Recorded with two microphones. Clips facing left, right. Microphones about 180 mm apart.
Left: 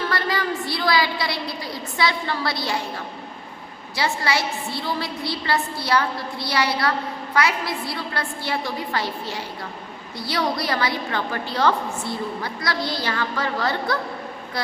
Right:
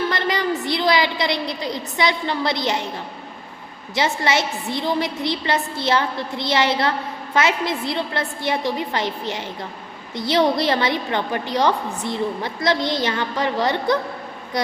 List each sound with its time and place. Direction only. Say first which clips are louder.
0.1 s a woman's voice: right 3 dB; 20° right (ahead or behind)
3.9 s a woman's voice: right 3 dB; 20° right (ahead or behind)